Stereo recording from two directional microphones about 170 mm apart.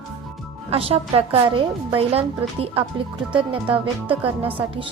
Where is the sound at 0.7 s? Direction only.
35° right (ahead or behind).